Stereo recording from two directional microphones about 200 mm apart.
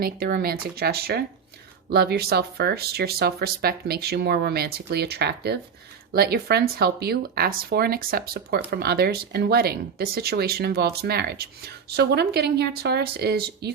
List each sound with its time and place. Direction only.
0.0 s speech: 50° right (ahead or behind)